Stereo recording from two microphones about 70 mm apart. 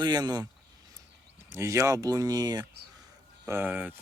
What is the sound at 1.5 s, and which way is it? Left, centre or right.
Speech, right.